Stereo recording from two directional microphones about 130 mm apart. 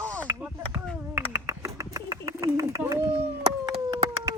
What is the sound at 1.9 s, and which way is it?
Bird, 25° right (ahead or behind).